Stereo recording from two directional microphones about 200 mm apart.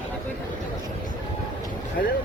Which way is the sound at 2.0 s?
50° left (ahead or behind).